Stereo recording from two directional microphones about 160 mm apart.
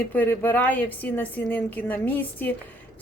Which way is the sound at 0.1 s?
10° left (ahead or behind).